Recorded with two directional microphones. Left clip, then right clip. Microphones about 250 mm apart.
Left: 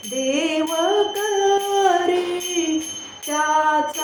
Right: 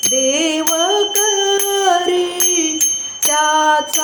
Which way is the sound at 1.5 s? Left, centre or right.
Right.